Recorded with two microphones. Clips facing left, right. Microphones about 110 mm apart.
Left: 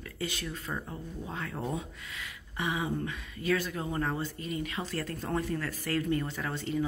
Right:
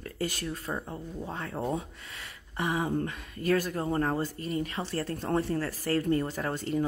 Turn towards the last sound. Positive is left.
turn(degrees=-45)  # may be behind; listen again after turning